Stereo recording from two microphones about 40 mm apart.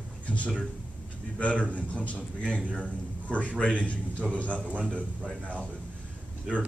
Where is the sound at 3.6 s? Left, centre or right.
Left.